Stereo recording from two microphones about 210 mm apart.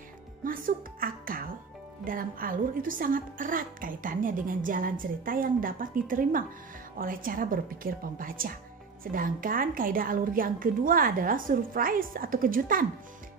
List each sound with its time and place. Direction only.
0.4 s a woman's voice: 40° right (ahead or behind)